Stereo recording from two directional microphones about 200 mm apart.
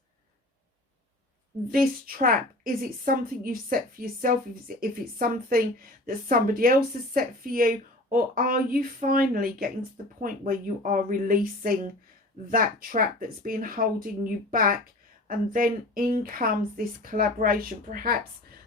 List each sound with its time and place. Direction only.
1.7 s a woman's voice: 45° right (ahead or behind)